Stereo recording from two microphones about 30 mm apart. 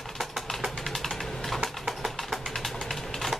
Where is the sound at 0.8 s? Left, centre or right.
Centre.